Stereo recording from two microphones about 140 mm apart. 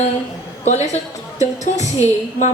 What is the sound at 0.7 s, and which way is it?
A woman's voice, 55° left (ahead or behind).